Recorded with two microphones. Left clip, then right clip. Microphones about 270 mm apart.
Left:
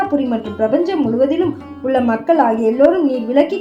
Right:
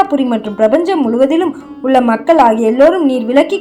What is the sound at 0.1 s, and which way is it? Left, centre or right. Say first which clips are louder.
A woman's voice: right 4 dB; right.